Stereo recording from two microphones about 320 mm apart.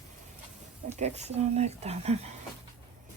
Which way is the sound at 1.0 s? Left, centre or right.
Centre.